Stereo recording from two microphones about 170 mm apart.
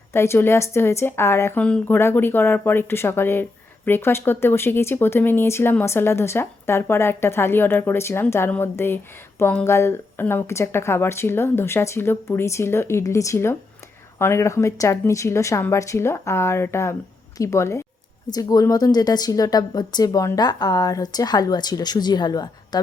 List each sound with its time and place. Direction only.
0.1 s a woman's voice: 15° left (ahead or behind)